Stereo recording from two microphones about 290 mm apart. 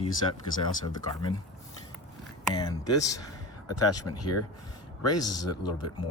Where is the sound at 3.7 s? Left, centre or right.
Left.